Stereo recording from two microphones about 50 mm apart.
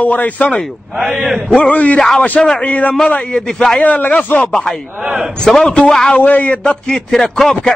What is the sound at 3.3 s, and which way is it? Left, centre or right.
Speech, centre.